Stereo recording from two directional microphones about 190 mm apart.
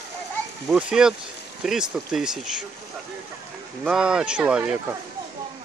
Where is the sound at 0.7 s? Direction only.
5° right (ahead or behind).